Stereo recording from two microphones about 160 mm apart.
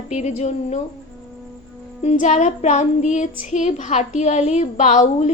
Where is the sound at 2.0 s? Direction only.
50° left (ahead or behind).